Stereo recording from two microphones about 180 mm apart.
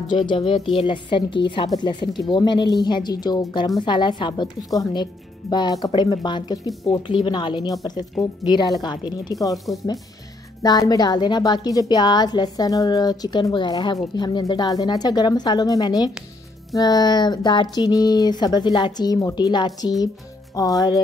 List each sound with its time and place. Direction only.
0.1 s a woman's voice: 25° left (ahead or behind)
10.6 s a woman's voice: 20° left (ahead or behind)